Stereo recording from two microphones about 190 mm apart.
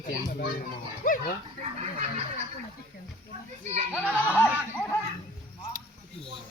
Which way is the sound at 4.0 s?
10° left (ahead or behind).